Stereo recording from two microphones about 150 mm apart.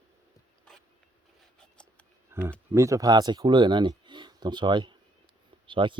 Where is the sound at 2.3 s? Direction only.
15° right (ahead or behind).